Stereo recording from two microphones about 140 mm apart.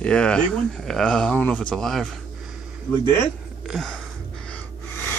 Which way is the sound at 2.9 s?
15° left (ahead or behind).